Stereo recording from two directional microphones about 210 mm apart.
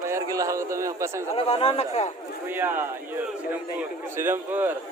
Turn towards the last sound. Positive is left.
turn(degrees=-10)  # may be behind; listen again after turning